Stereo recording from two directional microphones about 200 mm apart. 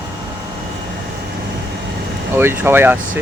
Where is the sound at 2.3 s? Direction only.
10° right (ahead or behind).